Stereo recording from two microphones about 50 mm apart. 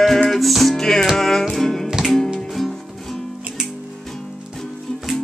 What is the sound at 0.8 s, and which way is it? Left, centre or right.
Music, centre.